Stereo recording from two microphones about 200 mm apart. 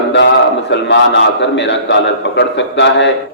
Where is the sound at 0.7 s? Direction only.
60° left (ahead or behind).